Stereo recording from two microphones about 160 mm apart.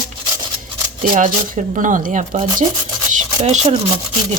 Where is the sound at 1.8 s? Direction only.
55° right (ahead or behind).